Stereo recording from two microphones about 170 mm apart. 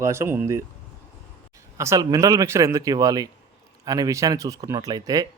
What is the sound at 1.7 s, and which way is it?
A man's voice, 20° right (ahead or behind).